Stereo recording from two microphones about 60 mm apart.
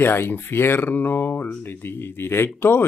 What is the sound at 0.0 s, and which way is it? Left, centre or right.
Speech, left.